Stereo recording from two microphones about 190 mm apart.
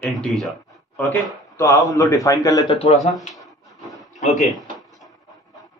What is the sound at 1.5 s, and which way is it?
A man's voice, 15° left (ahead or behind).